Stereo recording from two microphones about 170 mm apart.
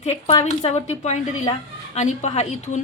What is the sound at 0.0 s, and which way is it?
A woman's voice, 40° left (ahead or behind).